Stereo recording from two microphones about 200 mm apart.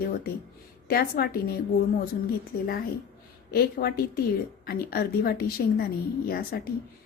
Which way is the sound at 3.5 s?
50° left (ahead or behind).